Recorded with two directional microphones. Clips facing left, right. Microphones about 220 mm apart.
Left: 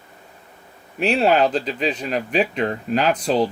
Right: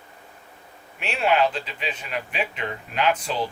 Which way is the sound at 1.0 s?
35° left (ahead or behind).